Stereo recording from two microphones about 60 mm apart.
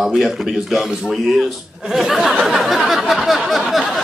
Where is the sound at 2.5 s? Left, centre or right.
Centre.